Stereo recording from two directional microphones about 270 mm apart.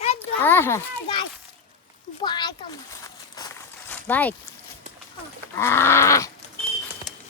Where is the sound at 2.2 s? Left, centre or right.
Centre.